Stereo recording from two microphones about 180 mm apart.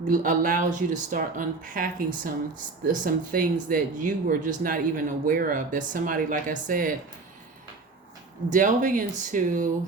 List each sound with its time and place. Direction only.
0.0 s speech: 45° right (ahead or behind)
8.4 s speech: 45° right (ahead or behind)